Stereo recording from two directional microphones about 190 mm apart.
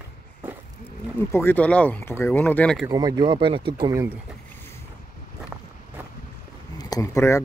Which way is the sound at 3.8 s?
15° right (ahead or behind).